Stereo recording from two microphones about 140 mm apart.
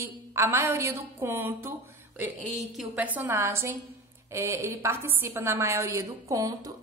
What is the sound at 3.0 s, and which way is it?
A woman's voice, 15° right (ahead or behind).